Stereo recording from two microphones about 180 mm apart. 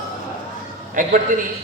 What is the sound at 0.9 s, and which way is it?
Speech, 50° right (ahead or behind).